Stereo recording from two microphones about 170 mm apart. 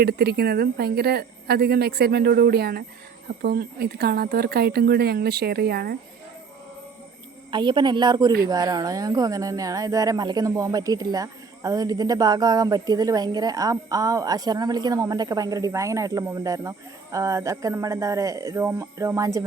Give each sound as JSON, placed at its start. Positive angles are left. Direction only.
{"t": 0.0, "sound": "a woman's voice", "side_deg": -70}
{"t": 7.5, "sound": "speech", "side_deg": -25}